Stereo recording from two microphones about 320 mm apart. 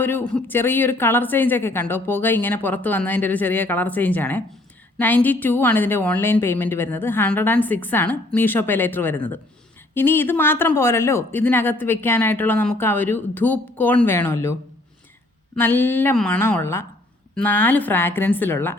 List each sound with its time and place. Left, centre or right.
0.0 s speech: centre
15.5 s speech: centre